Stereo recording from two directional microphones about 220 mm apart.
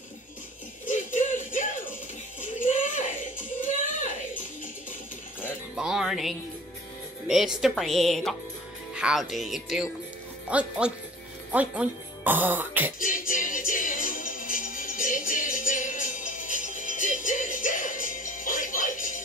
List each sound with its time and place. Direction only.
0.8 s music: 35° left (ahead or behind)
2.4 s a sound: 35° left (ahead or behind)
5.8 s music: centre (ahead or behind)
7.2 s speech: centre (ahead or behind)
13.0 s music: 40° left (ahead or behind)